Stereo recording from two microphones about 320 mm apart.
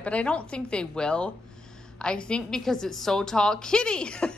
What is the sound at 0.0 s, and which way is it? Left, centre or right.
A woman's voice, centre.